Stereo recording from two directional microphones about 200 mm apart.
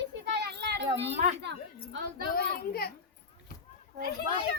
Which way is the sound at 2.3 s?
50° left (ahead or behind).